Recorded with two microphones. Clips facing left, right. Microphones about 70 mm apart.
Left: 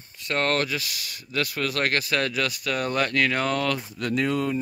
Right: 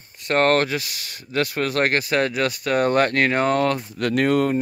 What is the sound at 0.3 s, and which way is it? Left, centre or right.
Speech, right.